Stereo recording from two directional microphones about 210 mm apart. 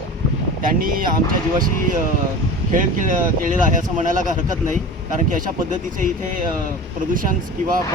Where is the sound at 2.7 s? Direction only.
40° right (ahead or behind).